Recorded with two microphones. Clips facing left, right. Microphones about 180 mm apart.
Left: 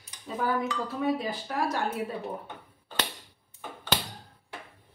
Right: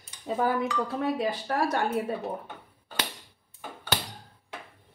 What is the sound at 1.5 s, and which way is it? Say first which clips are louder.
Speech: right 1 dB; 60° right (ahead or behind).